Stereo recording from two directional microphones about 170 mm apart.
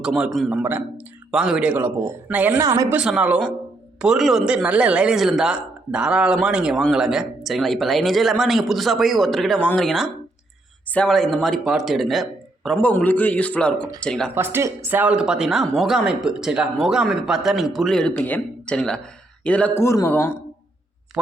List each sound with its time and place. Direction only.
0.0 s speech: 5° right (ahead or behind); by 2.9 s 20° right (ahead or behind)
2.9 s a man's voice: 5° right (ahead or behind)
14.3 s a man's voice: 15° right (ahead or behind); by 20.3 s 15° left (ahead or behind)